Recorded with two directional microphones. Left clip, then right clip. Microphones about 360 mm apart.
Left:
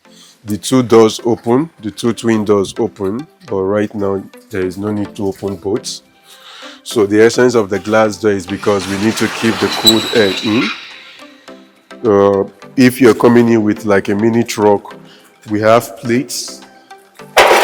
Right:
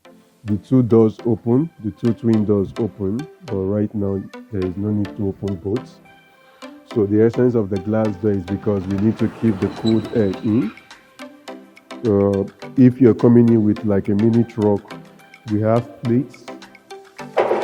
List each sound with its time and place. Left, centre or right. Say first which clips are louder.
0.7 s speech: left 7 dB; centre
12.0 s speech: left 8 dB; centre
13.1 s speech: left 5 dB; centre
17.2 s music: left 10 dB; centre